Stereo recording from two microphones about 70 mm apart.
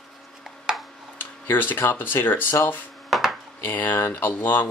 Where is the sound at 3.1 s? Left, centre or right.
Centre.